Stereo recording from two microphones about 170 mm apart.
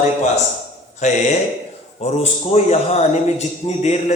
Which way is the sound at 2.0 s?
40° left (ahead or behind).